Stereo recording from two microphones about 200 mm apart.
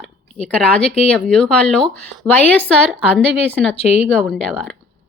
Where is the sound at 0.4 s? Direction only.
5° left (ahead or behind).